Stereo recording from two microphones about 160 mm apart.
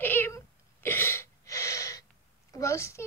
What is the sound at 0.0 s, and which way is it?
Cat, 15° left (ahead or behind).